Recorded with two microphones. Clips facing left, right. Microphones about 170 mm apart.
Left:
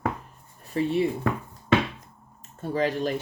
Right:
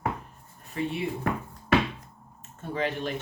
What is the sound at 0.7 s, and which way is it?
Speech, 35° left (ahead or behind).